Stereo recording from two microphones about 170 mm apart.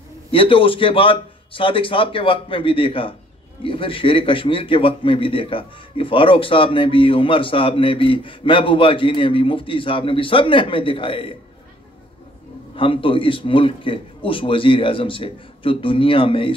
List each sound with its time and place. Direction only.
0.3 s a man's voice: 30° left (ahead or behind)
12.7 s a man's voice: 30° left (ahead or behind)